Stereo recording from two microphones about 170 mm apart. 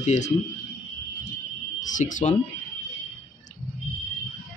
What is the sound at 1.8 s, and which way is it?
Speech, 50° left (ahead or behind).